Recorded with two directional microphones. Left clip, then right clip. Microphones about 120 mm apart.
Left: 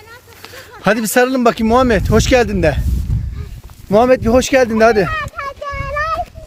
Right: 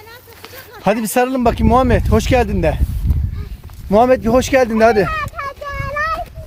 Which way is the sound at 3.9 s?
70° left (ahead or behind).